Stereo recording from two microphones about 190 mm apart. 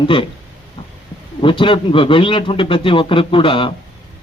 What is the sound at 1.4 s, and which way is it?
A man's voice, 25° left (ahead or behind).